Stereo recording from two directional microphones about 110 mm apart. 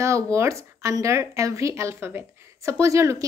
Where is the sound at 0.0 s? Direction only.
25° right (ahead or behind).